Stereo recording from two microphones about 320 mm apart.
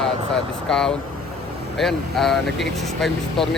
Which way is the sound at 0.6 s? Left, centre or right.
Centre.